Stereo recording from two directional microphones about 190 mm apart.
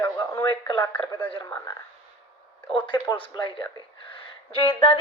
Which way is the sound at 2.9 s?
25° left (ahead or behind).